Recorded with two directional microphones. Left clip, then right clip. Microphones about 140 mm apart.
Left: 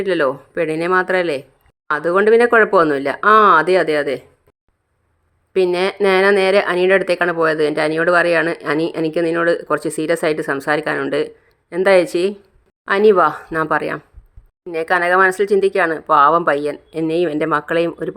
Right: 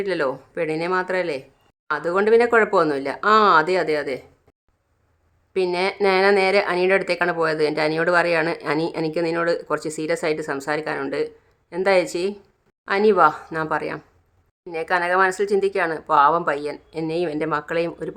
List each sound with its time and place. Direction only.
0.0 s speech: 25° left (ahead or behind)
5.5 s speech: 30° left (ahead or behind)